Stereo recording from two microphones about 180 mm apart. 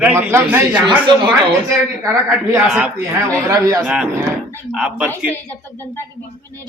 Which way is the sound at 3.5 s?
20° right (ahead or behind).